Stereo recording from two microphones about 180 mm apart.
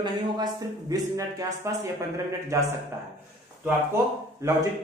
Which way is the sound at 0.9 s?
20° right (ahead or behind).